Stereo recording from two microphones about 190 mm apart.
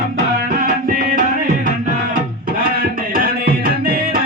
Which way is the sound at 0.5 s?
50° right (ahead or behind).